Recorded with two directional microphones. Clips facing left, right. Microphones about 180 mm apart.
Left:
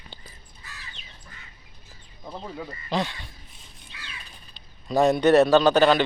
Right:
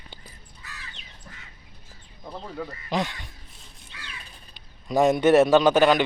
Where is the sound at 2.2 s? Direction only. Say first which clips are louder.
Right 1 dB; 5° left (ahead or behind).